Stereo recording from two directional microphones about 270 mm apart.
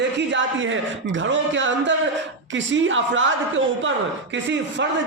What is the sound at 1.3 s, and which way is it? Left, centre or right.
A man's voice, right.